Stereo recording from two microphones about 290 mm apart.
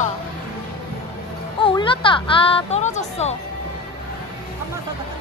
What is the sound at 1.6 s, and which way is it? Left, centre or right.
Speech, centre.